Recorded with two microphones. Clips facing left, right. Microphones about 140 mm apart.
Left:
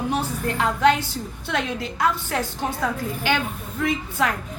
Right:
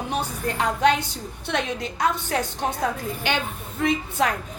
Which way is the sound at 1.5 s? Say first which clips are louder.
Even; 20° right (ahead or behind).